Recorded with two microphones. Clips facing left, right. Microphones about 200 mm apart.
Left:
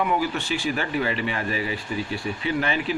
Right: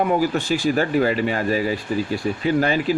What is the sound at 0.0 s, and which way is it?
Speech, 40° right (ahead or behind).